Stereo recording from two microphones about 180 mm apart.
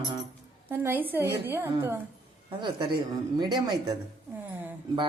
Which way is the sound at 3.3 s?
25° right (ahead or behind).